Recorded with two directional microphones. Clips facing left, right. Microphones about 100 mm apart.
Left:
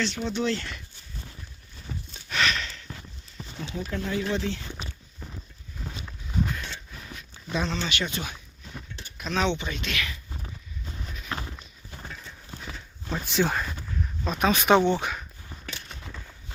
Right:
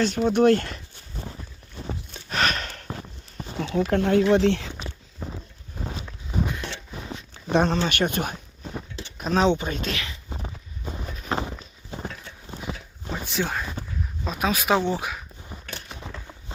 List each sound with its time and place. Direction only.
0.0 s speech: 45° right (ahead or behind)
1.9 s horse: 45° right (ahead or behind)
3.6 s speech: 65° right (ahead or behind)
5.2 s horse: 35° right (ahead or behind)
6.9 s zipper: 25° right (ahead or behind)
7.5 s speech: 50° right (ahead or behind); by 10.2 s 30° right (ahead or behind)
10.8 s a sound: 45° right (ahead or behind)
11.3 s clip-clop: 30° right (ahead or behind)
12.5 s horse: 20° right (ahead or behind)
13.2 s speech: centre (ahead or behind)
15.9 s a sound: 25° right (ahead or behind)